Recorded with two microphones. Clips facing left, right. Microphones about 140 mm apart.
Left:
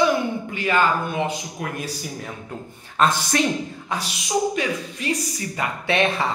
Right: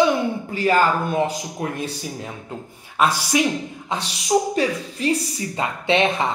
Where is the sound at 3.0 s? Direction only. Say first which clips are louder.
Right 1 dB; 10° right (ahead or behind).